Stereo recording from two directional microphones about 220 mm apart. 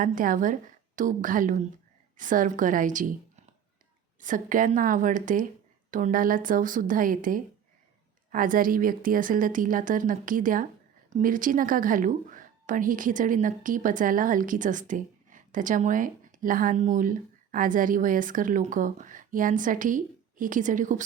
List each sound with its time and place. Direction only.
0.0 s a woman's voice: 40° right (ahead or behind)